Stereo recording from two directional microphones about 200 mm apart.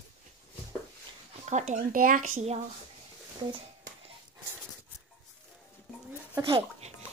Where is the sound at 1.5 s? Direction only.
40° right (ahead or behind).